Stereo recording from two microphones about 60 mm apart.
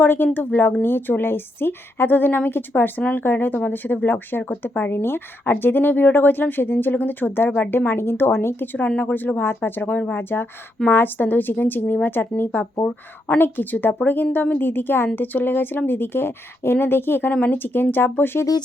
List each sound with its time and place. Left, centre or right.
0.0 s speech: left
12.8 s speech: left